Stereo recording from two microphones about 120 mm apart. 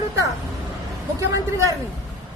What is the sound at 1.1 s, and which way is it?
Speech, 25° right (ahead or behind).